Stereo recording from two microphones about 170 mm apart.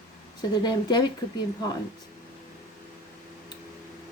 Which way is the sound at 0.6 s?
25° left (ahead or behind).